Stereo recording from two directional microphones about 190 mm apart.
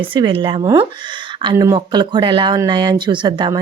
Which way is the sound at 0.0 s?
25° right (ahead or behind).